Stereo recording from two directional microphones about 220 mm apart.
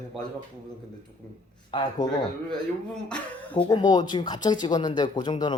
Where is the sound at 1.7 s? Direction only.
20° left (ahead or behind).